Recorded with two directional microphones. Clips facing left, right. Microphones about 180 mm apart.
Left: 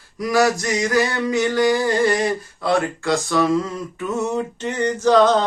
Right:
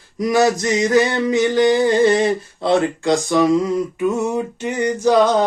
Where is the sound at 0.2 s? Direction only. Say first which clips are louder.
Right 2 dB; 20° right (ahead or behind).